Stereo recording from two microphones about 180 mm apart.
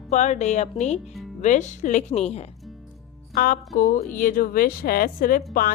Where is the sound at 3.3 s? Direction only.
50° left (ahead or behind).